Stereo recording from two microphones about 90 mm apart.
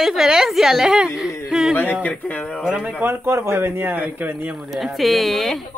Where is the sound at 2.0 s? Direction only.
15° left (ahead or behind).